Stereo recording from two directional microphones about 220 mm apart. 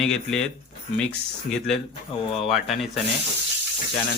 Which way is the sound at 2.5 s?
Centre (ahead or behind).